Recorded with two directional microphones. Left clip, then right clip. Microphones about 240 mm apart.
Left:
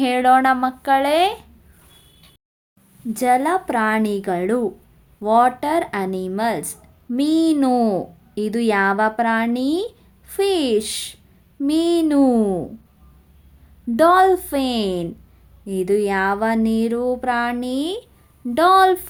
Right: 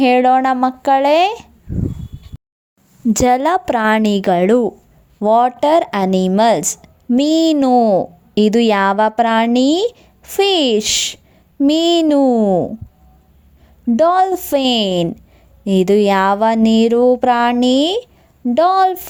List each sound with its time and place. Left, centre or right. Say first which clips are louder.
0.0 s a woman's voice: right 3 dB; right
3.1 s a woman's voice: right 4 dB; right
13.9 s a woman's voice: right 1 dB; right